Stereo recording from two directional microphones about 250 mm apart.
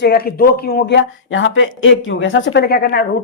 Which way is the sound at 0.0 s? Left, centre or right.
Left.